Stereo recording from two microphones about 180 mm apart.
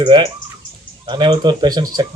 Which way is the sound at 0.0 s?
25° right (ahead or behind).